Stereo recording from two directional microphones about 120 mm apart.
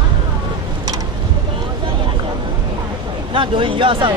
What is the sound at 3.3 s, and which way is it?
Speech, 45° right (ahead or behind).